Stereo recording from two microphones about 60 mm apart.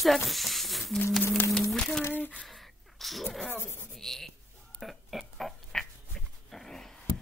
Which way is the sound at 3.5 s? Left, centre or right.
Left.